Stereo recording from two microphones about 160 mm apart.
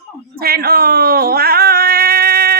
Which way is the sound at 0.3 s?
70° right (ahead or behind).